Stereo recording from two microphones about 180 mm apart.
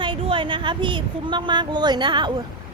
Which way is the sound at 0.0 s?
25° right (ahead or behind).